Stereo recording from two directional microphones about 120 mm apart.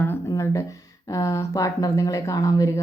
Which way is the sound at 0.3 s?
25° left (ahead or behind).